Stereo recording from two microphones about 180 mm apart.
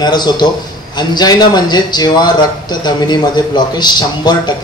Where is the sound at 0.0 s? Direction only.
25° left (ahead or behind).